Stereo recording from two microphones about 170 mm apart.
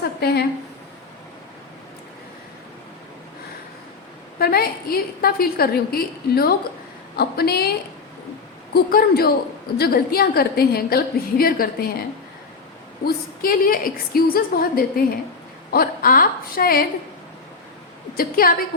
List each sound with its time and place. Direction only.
0.0 s a sound: 70° left (ahead or behind)
4.4 s a woman's voice: 65° left (ahead or behind)
8.7 s a woman's voice: 60° left (ahead or behind)
13.4 s a woman's voice: 55° left (ahead or behind)
18.2 s a woman's voice: 60° left (ahead or behind)